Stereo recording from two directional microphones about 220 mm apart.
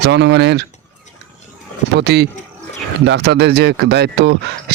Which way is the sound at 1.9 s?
50° right (ahead or behind).